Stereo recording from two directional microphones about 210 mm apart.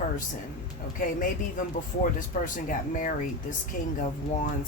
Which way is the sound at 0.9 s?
40° left (ahead or behind).